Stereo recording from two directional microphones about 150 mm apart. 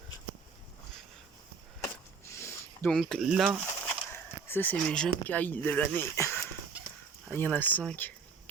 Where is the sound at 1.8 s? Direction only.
20° left (ahead or behind).